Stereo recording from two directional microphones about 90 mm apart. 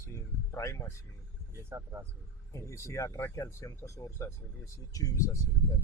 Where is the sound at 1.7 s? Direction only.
30° right (ahead or behind).